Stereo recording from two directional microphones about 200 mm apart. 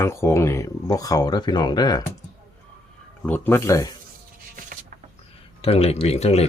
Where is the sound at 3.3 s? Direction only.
10° left (ahead or behind).